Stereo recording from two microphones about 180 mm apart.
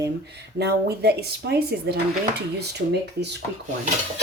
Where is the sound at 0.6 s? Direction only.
65° right (ahead or behind).